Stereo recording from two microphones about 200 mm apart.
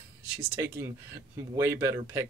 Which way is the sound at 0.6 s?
10° right (ahead or behind).